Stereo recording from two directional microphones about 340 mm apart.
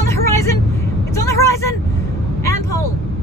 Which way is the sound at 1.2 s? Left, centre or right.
Centre.